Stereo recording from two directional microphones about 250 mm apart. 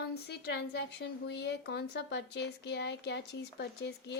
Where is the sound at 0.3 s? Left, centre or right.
Left.